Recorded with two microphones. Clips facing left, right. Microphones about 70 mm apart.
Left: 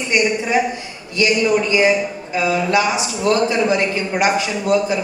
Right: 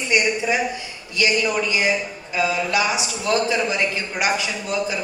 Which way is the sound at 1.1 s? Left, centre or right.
Left.